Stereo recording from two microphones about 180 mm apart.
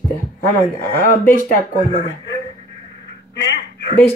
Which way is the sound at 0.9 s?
15° left (ahead or behind).